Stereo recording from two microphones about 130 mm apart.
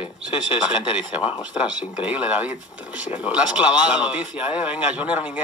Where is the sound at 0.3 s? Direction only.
40° left (ahead or behind).